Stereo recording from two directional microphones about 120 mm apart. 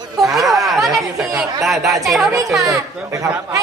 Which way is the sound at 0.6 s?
Centre (ahead or behind).